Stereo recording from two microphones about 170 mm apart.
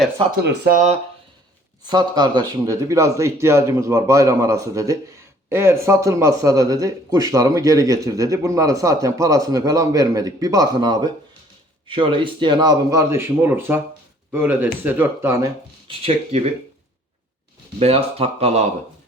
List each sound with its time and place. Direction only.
0.4 s speech: 70° right (ahead or behind)
1.9 s speech: 25° right (ahead or behind)
15.9 s speech: 35° right (ahead or behind)
17.7 s speech: 35° right (ahead or behind)